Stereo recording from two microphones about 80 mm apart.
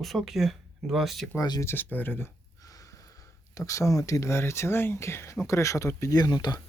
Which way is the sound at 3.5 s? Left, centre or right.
Left.